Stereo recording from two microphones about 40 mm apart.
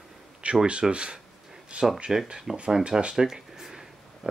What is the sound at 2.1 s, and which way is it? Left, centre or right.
Speech, centre.